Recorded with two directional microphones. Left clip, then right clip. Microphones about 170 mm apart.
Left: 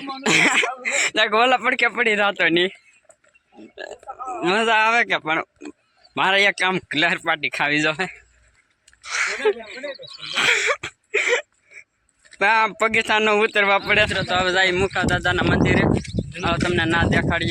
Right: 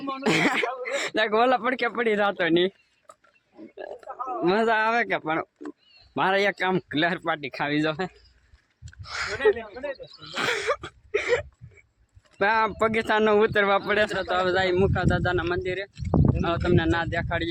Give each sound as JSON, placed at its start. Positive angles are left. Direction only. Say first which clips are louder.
{"t": 0.0, "sound": "speech", "louder": "left 6 dB", "side_deg": -10}
{"t": 3.8, "sound": "speech", "louder": "left 2 dB", "side_deg": 0}
{"t": 6.1, "sound": "speech", "louder": "left 5 dB", "side_deg": -20}
{"t": 11.6, "sound": "hiccup", "louder": "left 12 dB", "side_deg": -5}
{"t": 12.4, "sound": "speech", "louder": "left 4 dB", "side_deg": -15}
{"t": 14.1, "sound": "speech", "louder": "left 4 dB", "side_deg": 0}